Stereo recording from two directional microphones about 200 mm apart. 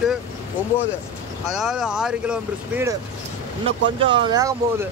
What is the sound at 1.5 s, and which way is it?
Speech, 5° right (ahead or behind).